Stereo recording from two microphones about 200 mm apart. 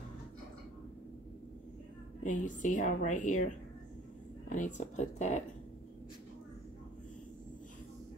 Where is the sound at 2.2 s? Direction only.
40° left (ahead or behind).